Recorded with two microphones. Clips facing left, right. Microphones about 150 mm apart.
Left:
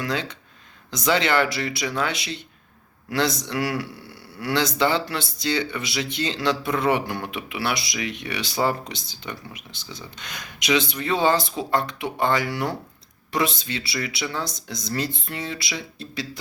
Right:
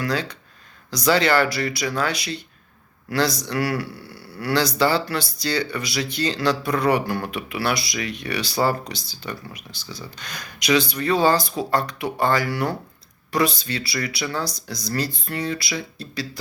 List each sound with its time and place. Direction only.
0.0 s speech: 20° left (ahead or behind)